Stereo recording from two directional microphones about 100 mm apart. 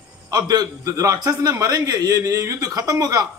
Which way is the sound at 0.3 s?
40° right (ahead or behind).